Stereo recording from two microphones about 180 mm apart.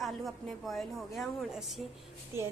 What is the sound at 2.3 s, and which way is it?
Speech, 15° right (ahead or behind).